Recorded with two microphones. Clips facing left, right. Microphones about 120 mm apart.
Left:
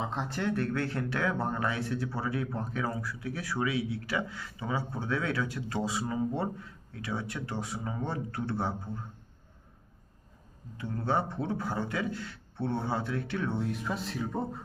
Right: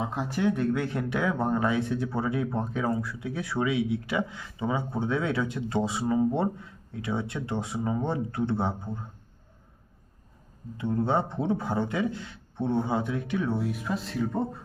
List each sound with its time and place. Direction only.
0.0 s speech: 10° right (ahead or behind)
10.8 s a man's voice: 25° right (ahead or behind); by 14.6 s centre (ahead or behind)